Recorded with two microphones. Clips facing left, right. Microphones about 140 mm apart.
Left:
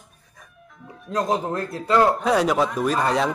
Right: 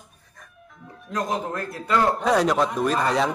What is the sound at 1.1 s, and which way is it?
Speech, 30° left (ahead or behind).